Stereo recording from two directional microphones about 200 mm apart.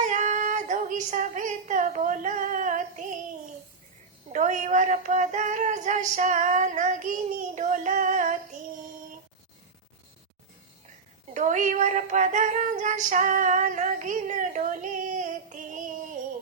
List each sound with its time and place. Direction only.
0.0 s child singing: 40° right (ahead or behind)
4.3 s female singing: 40° right (ahead or behind)
11.3 s female singing: 40° right (ahead or behind)